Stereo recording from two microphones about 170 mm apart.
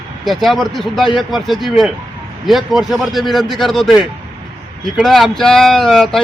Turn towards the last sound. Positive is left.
turn(degrees=0)  # may be behind; listen again after turning